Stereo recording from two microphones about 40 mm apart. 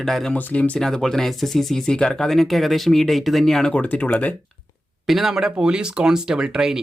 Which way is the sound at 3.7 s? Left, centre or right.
Left.